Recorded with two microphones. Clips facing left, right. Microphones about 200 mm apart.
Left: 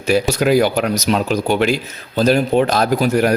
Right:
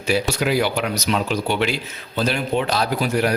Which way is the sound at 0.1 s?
45° left (ahead or behind).